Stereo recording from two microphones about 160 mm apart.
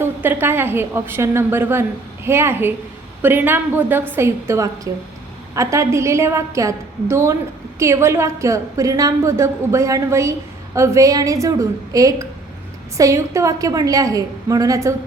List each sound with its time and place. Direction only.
0.0 s a woman's voice: 15° right (ahead or behind)